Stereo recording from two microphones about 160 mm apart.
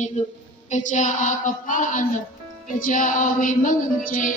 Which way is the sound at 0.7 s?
50° left (ahead or behind).